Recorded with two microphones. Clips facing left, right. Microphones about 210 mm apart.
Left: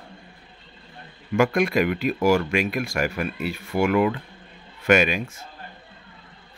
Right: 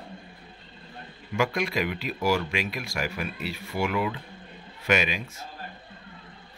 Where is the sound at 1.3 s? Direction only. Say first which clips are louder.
Left 7 dB; 50° left (ahead or behind).